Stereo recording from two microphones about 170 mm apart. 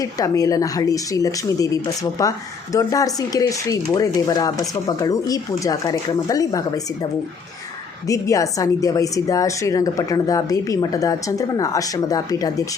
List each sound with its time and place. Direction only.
0.0 s a woman's voice: 20° left (ahead or behind)